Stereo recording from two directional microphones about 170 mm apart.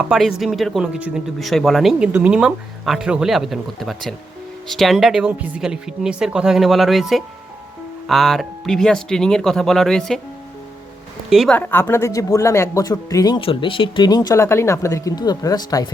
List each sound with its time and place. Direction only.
0.1 s speech: centre (ahead or behind)
11.3 s speech: centre (ahead or behind)
11.5 s speech: 10° left (ahead or behind)